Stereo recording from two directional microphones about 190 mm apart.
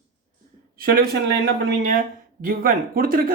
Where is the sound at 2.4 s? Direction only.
50° right (ahead or behind).